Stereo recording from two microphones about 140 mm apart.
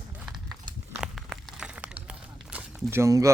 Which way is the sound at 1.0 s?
5° right (ahead or behind).